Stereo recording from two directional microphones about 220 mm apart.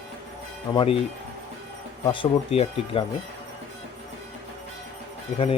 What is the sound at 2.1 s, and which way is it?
Speech, 25° left (ahead or behind).